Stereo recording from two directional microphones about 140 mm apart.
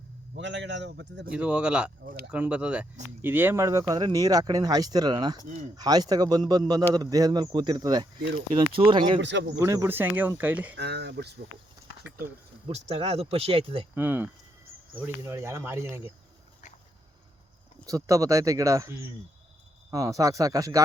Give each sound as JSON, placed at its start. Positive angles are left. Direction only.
{"t": 1.3, "sound": "speech", "side_deg": -10}
{"t": 8.4, "sound": "speech", "side_deg": -40}
{"t": 9.6, "sound": "speech", "side_deg": -20}
{"t": 12.6, "sound": "speech", "side_deg": -40}
{"t": 13.9, "sound": "speech", "side_deg": -15}
{"t": 17.8, "sound": "speech", "side_deg": -25}